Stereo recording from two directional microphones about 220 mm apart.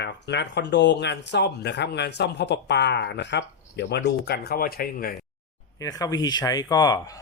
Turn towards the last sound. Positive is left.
turn(degrees=15)  # may be behind; listen again after turning